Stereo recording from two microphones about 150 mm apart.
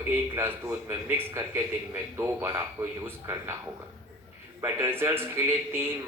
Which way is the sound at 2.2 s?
15° right (ahead or behind).